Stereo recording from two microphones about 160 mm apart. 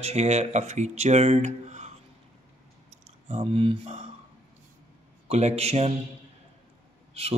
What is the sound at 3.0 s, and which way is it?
Speech, 40° right (ahead or behind).